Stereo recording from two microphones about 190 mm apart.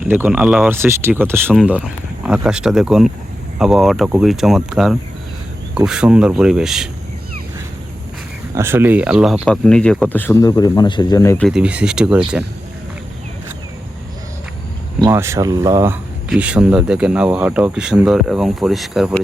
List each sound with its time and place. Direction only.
0.1 s speech: 10° right (ahead or behind)
8.5 s speech: 10° right (ahead or behind); by 11.4 s 15° left (ahead or behind)
11.4 s speech: 5° right (ahead or behind)
15.0 s speech: 15° right (ahead or behind)